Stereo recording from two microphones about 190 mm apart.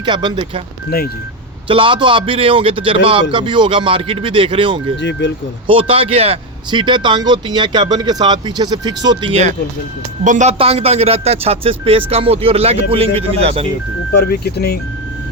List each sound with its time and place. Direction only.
0.0 s speech: 25° right (ahead or behind)
0.9 s speech: 55° left (ahead or behind)
1.6 s speech: 25° right (ahead or behind)
4.9 s speech: 70° left (ahead or behind)
5.6 s speech: 30° right (ahead or behind)
9.3 s a man's voice: 35° right (ahead or behind)
14.1 s speech: 60° left (ahead or behind)